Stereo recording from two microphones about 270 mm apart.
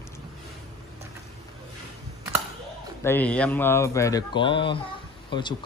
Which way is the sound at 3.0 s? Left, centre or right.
Centre.